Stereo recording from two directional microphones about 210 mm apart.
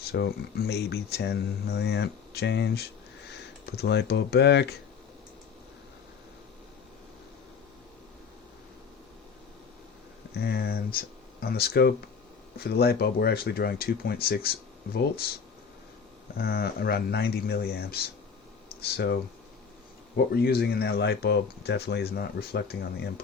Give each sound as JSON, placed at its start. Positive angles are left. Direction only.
{"t": 0.1, "sound": "speech", "side_deg": 50}
{"t": 10.3, "sound": "speech", "side_deg": 50}
{"t": 16.4, "sound": "speech", "side_deg": 50}
{"t": 20.1, "sound": "speech", "side_deg": 50}